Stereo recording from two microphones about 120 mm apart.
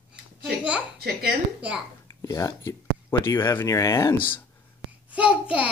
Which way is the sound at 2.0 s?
30° left (ahead or behind).